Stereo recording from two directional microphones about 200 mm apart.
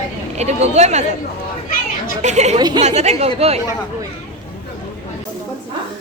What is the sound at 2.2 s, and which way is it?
Speech, 35° right (ahead or behind).